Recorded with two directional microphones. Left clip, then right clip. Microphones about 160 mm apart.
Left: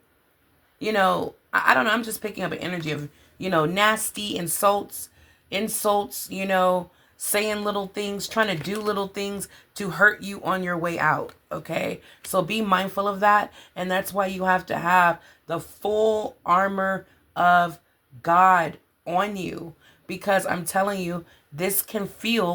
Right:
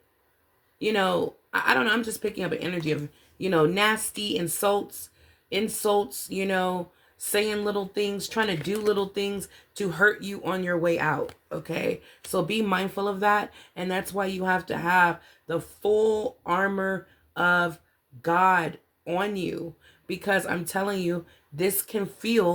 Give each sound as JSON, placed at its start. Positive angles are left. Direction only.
{"t": 0.8, "sound": "speech", "side_deg": 30}